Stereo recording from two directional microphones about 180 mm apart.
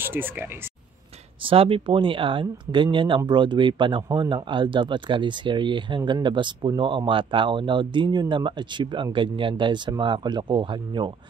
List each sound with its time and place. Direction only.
0.0 s speech: 10° right (ahead or behind)
1.4 s speech: 30° right (ahead or behind)